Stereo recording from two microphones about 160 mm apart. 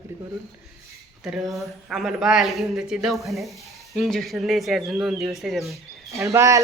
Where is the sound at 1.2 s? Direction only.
Centre (ahead or behind).